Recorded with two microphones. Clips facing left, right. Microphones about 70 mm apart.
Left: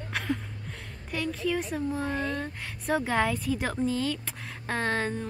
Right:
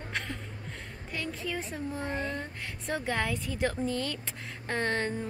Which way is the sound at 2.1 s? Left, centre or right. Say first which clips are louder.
Left 3 dB; centre.